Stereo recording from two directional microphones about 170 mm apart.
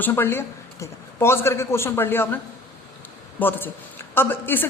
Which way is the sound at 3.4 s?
10° left (ahead or behind).